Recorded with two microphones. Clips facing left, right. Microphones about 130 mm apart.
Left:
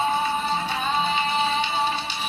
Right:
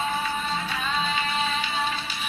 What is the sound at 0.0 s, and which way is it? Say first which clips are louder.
Music: left 4 dB; 30° left (ahead or behind).